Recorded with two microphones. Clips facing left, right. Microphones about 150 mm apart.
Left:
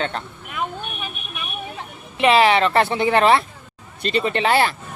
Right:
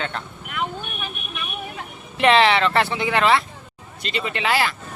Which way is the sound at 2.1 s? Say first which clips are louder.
Even; 5° left (ahead or behind).